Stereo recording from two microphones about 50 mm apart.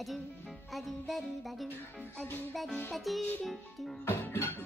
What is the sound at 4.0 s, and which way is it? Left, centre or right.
Music, left.